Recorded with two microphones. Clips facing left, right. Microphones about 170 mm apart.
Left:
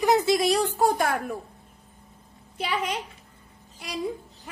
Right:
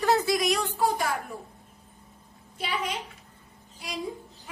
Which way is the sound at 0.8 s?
50° left (ahead or behind).